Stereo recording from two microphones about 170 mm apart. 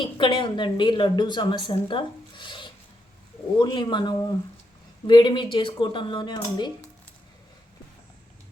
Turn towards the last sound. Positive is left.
turn(degrees=25)  # may be behind; listen again after turning